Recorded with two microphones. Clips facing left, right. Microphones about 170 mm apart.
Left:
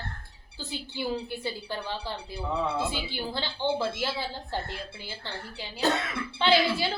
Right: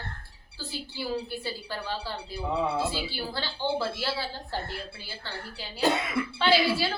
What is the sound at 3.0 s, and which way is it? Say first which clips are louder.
A woman's voice: left 1 dB; 20° left (ahead or behind).